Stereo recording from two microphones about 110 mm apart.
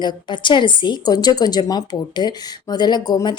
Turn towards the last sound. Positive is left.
turn(degrees=40)  # may be behind; listen again after turning